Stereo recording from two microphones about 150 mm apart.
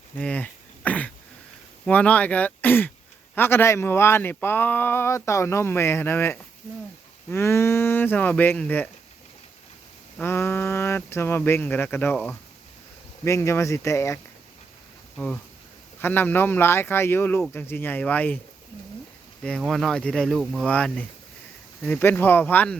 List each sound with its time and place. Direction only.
0.2 s a sound: 10° left (ahead or behind)
1.8 s speech: 10° left (ahead or behind)
10.2 s speech: 15° left (ahead or behind)
16.0 s speech: 15° left (ahead or behind)
19.4 s speech: 5° left (ahead or behind)